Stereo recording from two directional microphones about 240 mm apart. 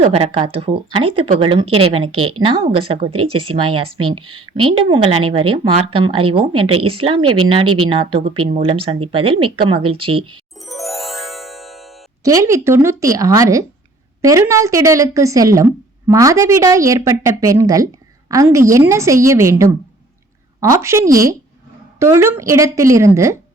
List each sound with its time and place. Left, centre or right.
0.0 s speech: right
7.2 s speech: right
7.5 s speech: right
10.7 s music: centre
12.2 s a woman's voice: centre